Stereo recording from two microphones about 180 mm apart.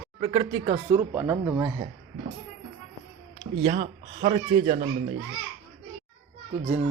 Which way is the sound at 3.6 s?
40° right (ahead or behind).